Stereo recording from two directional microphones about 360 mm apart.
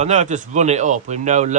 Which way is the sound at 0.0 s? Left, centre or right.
Centre.